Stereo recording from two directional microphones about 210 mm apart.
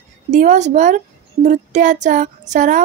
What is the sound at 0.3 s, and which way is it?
Speech, 35° right (ahead or behind).